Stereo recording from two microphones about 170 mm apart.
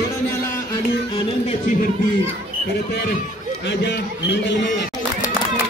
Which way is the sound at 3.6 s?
90° left.